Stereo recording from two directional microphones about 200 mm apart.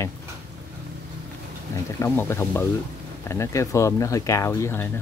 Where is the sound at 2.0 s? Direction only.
10° left (ahead or behind).